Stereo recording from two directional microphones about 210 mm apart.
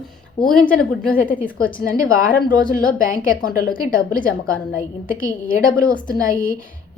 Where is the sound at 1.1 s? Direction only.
40° left (ahead or behind).